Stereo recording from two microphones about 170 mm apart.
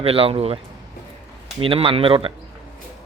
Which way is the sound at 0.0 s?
35° right (ahead or behind).